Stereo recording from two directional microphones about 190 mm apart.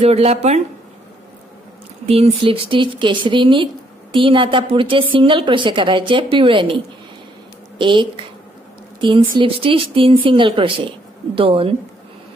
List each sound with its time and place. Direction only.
0.0 s speech: 35° right (ahead or behind)
2.0 s a woman's voice: 30° right (ahead or behind)
7.8 s a woman's voice: 25° right (ahead or behind)
9.4 s a woman's voice: 25° right (ahead or behind)